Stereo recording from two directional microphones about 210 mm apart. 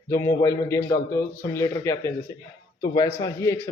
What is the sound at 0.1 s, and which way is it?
A man's voice, 15° left (ahead or behind).